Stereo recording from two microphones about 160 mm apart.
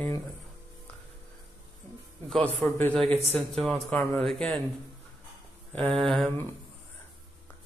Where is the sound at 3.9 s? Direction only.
15° left (ahead or behind).